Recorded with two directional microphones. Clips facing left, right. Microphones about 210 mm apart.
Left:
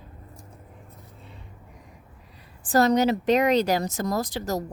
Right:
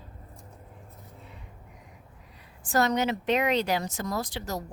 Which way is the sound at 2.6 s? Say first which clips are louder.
Left 5 dB; 35° left (ahead or behind).